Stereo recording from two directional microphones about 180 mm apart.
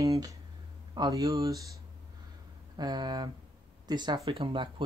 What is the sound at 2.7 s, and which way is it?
Speech, 25° right (ahead or behind).